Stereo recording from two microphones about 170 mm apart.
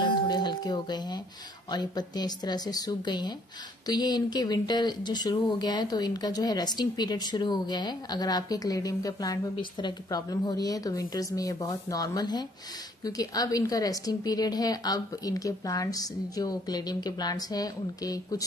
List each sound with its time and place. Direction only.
0.0 s music: 25° left (ahead or behind)
1.7 s speech: 25° left (ahead or behind)